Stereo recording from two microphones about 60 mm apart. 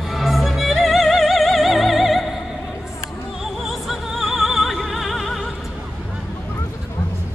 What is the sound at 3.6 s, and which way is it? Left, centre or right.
Music, centre.